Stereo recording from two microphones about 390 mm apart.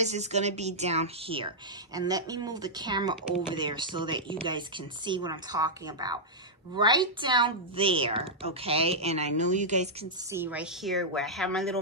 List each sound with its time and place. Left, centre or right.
0.0 s a woman's voice: centre
10.3 s a woman's voice: centre